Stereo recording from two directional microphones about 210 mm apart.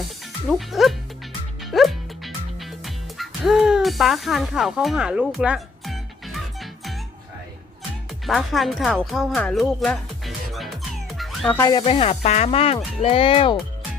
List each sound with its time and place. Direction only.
0.4 s speech: centre (ahead or behind)
1.7 s music: centre (ahead or behind)
8.3 s speech: centre (ahead or behind)
11.2 s music: centre (ahead or behind)
11.6 s speech: 25° left (ahead or behind)